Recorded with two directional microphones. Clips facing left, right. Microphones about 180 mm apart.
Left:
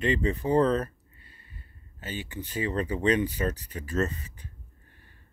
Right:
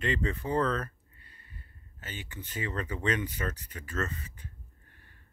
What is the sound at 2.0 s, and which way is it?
Speech, 35° left (ahead or behind).